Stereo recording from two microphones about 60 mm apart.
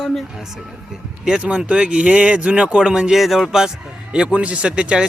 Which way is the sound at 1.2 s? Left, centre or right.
Centre.